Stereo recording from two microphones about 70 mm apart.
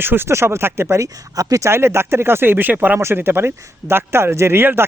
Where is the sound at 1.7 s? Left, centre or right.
Right.